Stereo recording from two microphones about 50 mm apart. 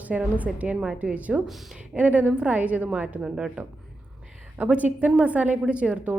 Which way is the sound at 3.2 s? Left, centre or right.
Centre.